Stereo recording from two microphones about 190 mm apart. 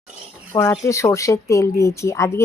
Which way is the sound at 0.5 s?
20° left (ahead or behind).